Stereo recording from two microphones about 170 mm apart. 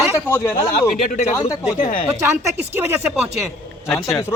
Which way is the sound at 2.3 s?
15° right (ahead or behind).